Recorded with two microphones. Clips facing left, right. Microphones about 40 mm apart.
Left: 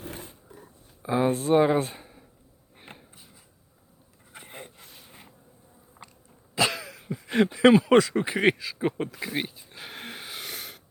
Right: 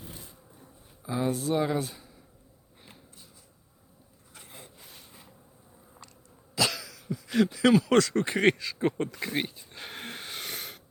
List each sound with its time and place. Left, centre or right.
0.0 s a sound: left
1.0 s speech: left
2.7 s insect: left
4.3 s a sound: left
4.8 s bee: centre
6.0 s insect: centre
6.6 s cough: left; by 10.8 s centre